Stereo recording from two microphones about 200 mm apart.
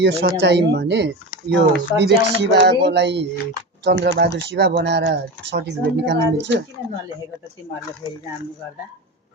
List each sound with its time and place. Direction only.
0.0 s speech: 60° right (ahead or behind)